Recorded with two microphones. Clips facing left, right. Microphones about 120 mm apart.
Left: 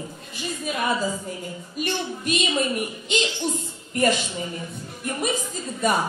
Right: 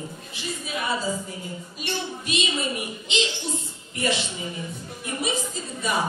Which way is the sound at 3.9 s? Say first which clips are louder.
Left 5 dB; 45° left (ahead or behind).